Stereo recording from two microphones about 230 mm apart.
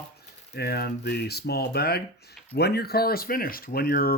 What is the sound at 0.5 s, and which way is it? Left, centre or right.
Speech, left.